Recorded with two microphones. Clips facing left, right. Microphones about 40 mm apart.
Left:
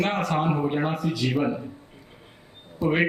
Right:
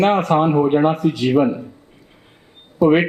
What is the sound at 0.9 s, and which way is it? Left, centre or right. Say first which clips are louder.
Speech: right 9 dB; right.